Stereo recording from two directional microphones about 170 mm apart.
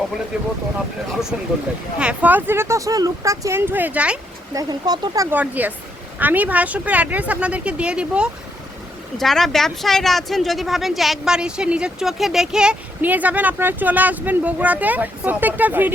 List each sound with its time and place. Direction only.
0.3 s speech: 5° right (ahead or behind)
4.5 s speech: 20° right (ahead or behind)
5.4 s speech: 10° right (ahead or behind)